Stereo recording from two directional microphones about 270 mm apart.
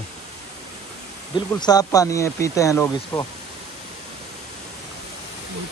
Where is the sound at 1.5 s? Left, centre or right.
Centre.